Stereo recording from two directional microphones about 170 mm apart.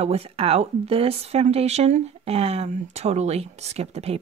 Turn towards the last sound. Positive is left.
turn(degrees=-35)  # may be behind; listen again after turning